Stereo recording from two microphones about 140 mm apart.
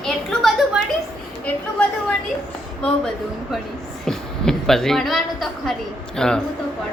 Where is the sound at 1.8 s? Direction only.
10° left (ahead or behind).